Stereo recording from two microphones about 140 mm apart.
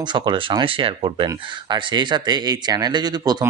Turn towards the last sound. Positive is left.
turn(degrees=-30)  # may be behind; listen again after turning